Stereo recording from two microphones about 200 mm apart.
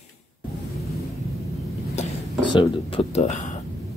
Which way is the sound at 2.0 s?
35° left (ahead or behind).